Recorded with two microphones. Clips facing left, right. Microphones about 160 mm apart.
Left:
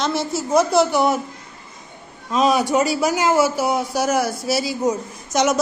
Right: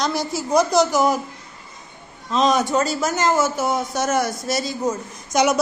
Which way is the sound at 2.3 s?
10° left (ahead or behind).